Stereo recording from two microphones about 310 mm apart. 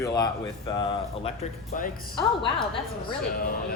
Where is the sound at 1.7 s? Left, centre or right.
Left.